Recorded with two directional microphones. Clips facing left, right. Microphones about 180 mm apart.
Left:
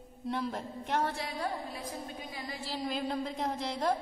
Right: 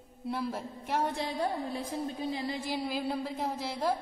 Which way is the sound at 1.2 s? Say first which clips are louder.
Right 4 dB; 30° right (ahead or behind).